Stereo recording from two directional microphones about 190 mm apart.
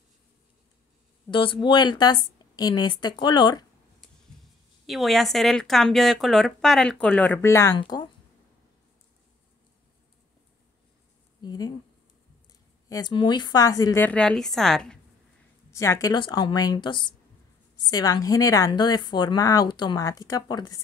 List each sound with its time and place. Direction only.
1.3 s a woman's voice: 25° left (ahead or behind)
4.8 s a woman's voice: centre (ahead or behind); by 8.1 s 25° left (ahead or behind)
11.4 s a woman's voice: 20° left (ahead or behind)
12.9 s a woman's voice: 25° left (ahead or behind); by 15.0 s 5° left (ahead or behind)
15.7 s a woman's voice: 15° left (ahead or behind)